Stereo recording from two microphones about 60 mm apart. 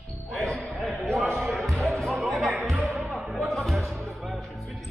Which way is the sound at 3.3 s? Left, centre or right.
Centre.